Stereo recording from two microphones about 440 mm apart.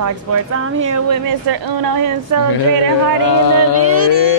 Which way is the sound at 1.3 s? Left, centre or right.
Right.